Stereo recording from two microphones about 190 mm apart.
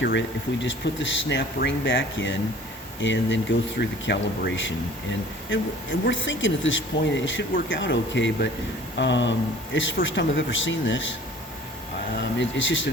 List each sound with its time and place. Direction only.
0.0 s speech: 70° left (ahead or behind)
5.5 s speech: 90° left; by 9.3 s 70° left (ahead or behind)
9.7 s speech: 80° left
12.4 s speech: 75° left (ahead or behind)